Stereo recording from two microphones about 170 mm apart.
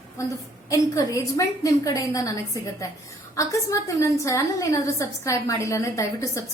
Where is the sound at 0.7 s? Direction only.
20° left (ahead or behind).